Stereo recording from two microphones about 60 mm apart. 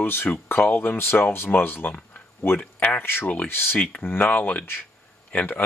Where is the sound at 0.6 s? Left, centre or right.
Left.